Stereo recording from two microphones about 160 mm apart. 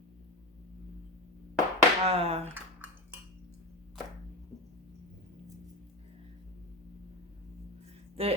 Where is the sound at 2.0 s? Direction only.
40° right (ahead or behind).